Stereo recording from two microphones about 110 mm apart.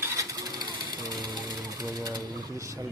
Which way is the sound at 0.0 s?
30° right (ahead or behind).